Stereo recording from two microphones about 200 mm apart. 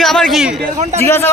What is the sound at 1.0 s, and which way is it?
Speech, 10° left (ahead or behind).